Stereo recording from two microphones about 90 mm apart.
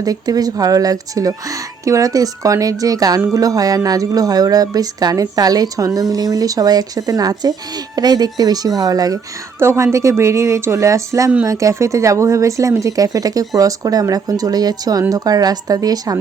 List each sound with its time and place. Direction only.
0.0 s speech: 45° right (ahead or behind)
9.6 s speech: 30° right (ahead or behind)